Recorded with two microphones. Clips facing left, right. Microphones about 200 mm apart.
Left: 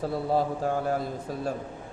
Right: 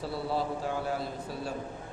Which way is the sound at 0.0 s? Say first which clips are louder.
Left 6 dB; 45° left (ahead or behind).